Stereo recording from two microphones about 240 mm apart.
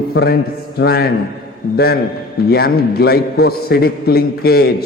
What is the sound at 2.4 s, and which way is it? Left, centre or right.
A man's voice, left.